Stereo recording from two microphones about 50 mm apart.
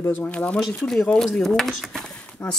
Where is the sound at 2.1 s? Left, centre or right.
Left.